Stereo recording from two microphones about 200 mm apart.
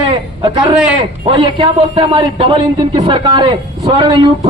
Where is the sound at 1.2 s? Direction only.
25° right (ahead or behind).